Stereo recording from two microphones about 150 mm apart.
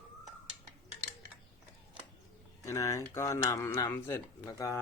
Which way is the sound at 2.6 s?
20° left (ahead or behind).